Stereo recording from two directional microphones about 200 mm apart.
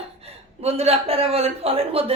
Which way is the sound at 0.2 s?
30° right (ahead or behind).